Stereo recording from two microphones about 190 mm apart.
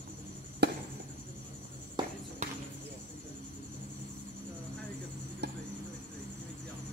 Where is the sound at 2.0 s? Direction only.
25° right (ahead or behind).